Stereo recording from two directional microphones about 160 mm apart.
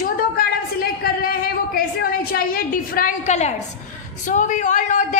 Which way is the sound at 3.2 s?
45° left (ahead or behind).